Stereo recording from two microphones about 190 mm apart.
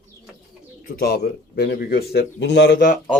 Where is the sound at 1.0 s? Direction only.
55° left (ahead or behind).